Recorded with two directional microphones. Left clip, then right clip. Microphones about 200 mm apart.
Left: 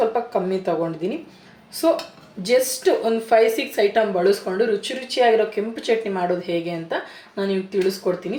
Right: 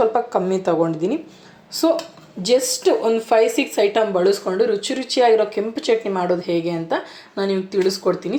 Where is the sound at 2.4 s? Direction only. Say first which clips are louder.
Right 1 dB; 25° right (ahead or behind).